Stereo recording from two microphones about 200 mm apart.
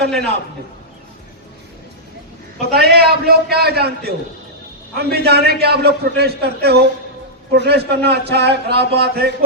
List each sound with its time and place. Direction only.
2.6 s a man's voice: 50° right (ahead or behind)